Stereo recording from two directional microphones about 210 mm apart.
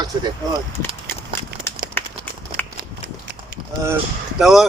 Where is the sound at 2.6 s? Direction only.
10° left (ahead or behind).